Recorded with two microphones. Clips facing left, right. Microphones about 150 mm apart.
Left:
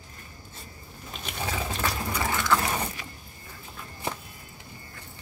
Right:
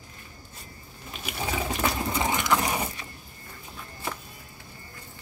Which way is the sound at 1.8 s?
20° right (ahead or behind).